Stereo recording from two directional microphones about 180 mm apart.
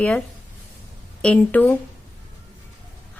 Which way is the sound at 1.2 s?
10° left (ahead or behind).